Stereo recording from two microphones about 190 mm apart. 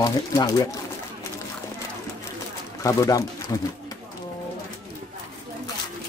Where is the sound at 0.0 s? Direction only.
20° left (ahead or behind).